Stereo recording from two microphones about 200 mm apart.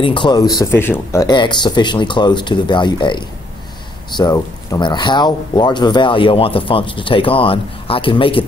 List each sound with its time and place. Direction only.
0.0 s speech: 25° left (ahead or behind)